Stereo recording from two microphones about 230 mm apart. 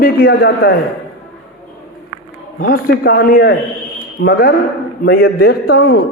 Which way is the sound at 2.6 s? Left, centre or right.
Left.